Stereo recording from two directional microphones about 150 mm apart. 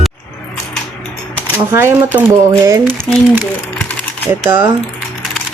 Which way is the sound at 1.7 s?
15° right (ahead or behind).